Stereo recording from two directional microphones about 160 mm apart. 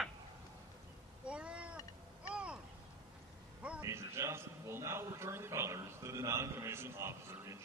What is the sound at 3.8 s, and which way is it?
A man's voice, 20° right (ahead or behind).